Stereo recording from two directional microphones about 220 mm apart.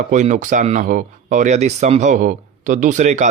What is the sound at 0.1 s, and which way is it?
Speech, 35° right (ahead or behind).